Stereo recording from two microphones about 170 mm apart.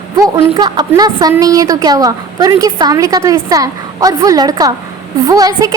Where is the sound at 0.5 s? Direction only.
25° right (ahead or behind).